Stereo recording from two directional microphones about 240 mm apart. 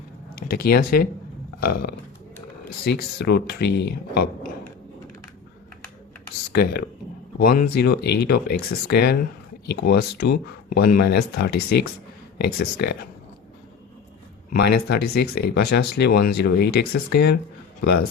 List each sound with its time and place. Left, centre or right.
0.5 s speech: left
6.5 s speech: left
14.5 s speech: left